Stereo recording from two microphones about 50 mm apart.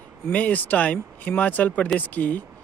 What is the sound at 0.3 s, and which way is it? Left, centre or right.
Speech, left.